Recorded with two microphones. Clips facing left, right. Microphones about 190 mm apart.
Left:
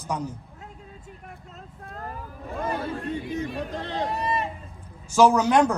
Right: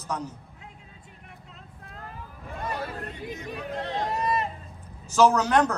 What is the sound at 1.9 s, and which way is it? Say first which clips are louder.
Vehicle: left 6 dB; 45° left (ahead or behind).